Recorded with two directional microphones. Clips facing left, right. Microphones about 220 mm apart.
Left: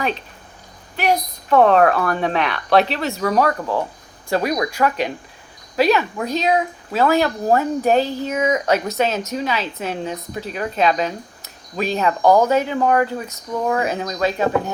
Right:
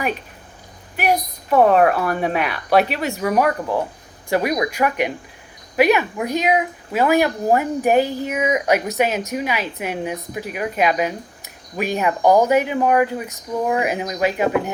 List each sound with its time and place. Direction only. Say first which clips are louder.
0.9 s speech: even; 10° right (ahead or behind)